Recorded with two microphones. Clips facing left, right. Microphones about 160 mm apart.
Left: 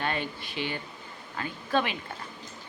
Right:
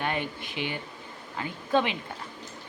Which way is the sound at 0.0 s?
15° right (ahead or behind).